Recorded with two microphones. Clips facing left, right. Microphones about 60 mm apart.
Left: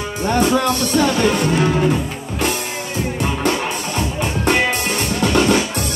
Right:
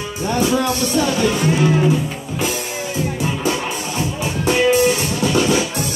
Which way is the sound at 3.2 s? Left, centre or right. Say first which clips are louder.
Left 4 dB; left.